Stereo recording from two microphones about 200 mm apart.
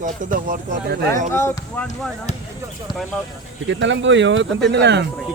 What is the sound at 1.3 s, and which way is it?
Speech, 10° left (ahead or behind).